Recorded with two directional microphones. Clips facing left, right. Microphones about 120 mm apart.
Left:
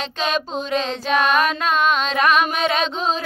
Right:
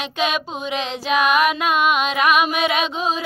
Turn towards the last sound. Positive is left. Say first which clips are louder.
# even
turn(degrees=-10)  # may be behind; listen again after turning